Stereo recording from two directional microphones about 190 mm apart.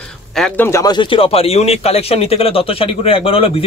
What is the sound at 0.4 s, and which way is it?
Speech, 10° left (ahead or behind).